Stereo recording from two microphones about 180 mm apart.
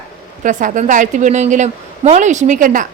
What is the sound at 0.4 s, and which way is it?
A woman's voice, 45° right (ahead or behind).